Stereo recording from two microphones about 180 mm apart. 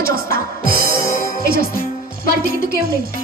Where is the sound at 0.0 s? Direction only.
55° right (ahead or behind).